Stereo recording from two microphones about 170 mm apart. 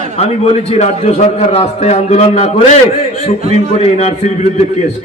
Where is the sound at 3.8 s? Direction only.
40° left (ahead or behind).